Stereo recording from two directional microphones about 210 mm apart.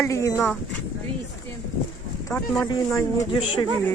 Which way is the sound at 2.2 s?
10° left (ahead or behind).